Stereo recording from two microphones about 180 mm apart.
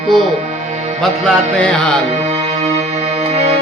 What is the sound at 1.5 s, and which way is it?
Music, 5° left (ahead or behind).